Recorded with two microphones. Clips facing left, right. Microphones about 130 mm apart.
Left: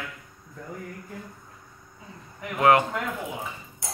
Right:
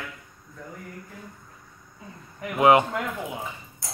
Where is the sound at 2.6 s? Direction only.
15° right (ahead or behind).